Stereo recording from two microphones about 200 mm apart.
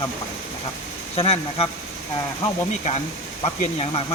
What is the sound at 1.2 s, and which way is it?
Speech, 30° left (ahead or behind).